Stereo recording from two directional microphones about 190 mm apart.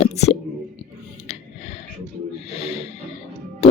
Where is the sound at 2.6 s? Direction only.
30° left (ahead or behind).